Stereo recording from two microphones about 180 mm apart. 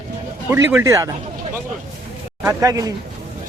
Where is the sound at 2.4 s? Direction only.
15° right (ahead or behind).